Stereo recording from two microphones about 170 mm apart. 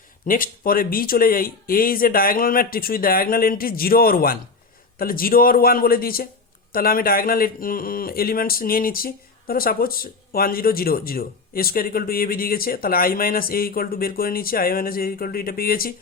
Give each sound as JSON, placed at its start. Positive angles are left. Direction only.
{"t": 0.3, "sound": "speech", "side_deg": 55}